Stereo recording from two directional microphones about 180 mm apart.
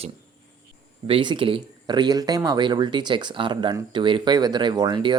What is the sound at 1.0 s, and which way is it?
Speech, 30° right (ahead or behind).